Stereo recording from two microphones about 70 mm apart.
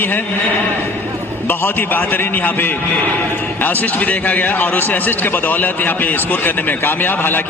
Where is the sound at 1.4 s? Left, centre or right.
Left.